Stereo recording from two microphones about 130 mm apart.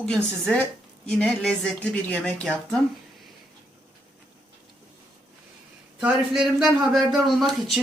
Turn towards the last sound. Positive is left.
turn(degrees=0)  # may be behind; listen again after turning